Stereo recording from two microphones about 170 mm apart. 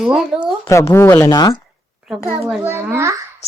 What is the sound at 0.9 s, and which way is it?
Speech, 15° left (ahead or behind).